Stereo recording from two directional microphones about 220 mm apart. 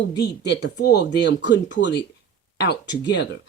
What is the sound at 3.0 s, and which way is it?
Speech, 50° left (ahead or behind).